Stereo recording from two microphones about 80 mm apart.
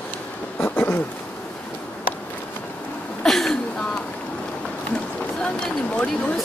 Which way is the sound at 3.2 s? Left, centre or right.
Centre.